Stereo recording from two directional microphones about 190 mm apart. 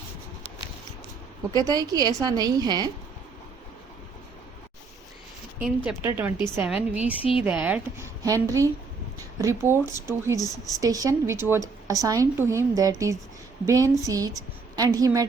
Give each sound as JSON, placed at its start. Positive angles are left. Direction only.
{"t": 1.5, "sound": "a woman's voice", "side_deg": -20}
{"t": 5.5, "sound": "a woman's voice", "side_deg": -5}